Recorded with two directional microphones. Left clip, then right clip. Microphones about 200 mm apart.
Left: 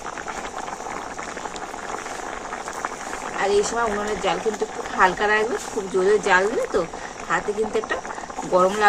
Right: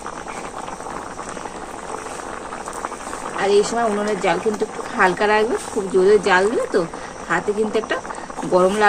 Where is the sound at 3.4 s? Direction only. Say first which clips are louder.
Right 4 dB; 20° right (ahead or behind).